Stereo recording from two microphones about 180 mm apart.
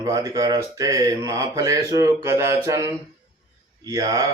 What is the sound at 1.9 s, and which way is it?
Mantra, 15° right (ahead or behind).